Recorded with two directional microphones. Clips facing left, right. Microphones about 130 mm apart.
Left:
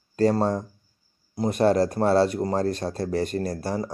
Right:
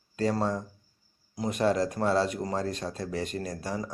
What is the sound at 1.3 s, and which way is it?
Speech, 35° left (ahead or behind).